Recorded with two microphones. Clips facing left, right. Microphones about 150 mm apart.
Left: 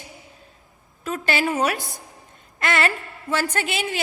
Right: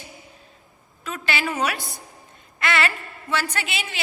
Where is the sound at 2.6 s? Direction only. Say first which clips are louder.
Left 1 dB; 45° left (ahead or behind).